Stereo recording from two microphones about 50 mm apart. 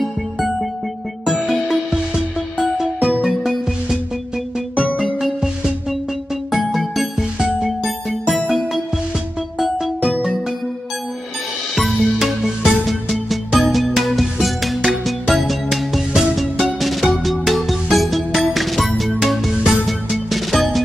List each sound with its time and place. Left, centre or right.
0.0 s music: centre
3.0 s music: centre
4.9 s music: centre
11.7 s music: centre